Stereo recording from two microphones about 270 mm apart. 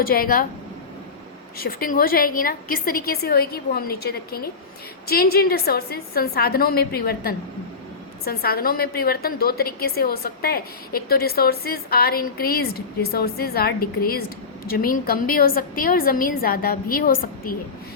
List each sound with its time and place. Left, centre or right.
0.0 s a woman's voice: left
1.6 s a woman's voice: left